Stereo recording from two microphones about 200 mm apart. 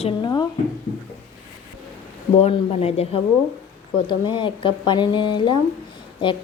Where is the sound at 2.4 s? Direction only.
30° left (ahead or behind).